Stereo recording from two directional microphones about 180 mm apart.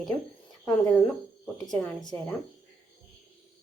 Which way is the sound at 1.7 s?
5° left (ahead or behind).